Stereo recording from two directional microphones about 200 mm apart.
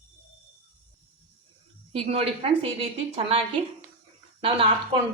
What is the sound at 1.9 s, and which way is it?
A woman's voice, 30° right (ahead or behind).